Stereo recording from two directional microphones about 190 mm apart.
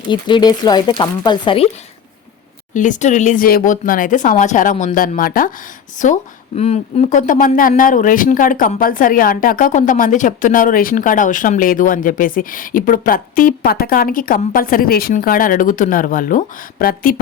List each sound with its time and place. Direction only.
0.1 s speech: 25° left (ahead or behind)
2.7 s speech: 40° left (ahead or behind)